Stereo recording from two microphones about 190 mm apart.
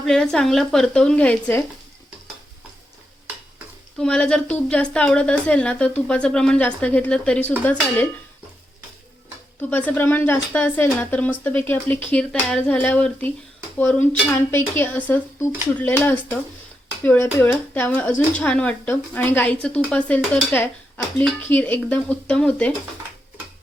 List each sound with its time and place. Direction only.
0.0 s a woman's voice: 5° left (ahead or behind)
3.9 s a woman's voice: 5° left (ahead or behind)
9.6 s speech: 10° left (ahead or behind)